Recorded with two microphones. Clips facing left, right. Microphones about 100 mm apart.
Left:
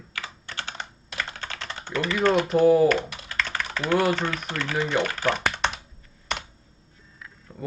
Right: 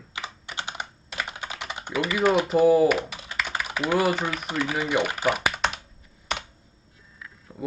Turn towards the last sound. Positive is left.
turn(degrees=0)  # may be behind; listen again after turning